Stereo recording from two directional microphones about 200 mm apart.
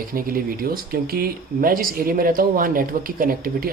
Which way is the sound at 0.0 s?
45° right (ahead or behind).